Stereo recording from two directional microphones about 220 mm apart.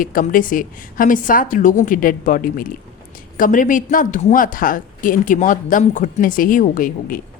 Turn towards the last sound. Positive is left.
turn(degrees=40)  # may be behind; listen again after turning